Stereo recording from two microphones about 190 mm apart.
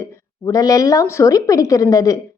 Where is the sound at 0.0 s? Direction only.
20° left (ahead or behind).